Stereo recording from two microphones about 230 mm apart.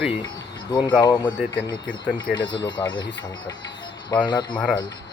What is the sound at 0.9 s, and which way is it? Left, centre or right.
Speech, centre.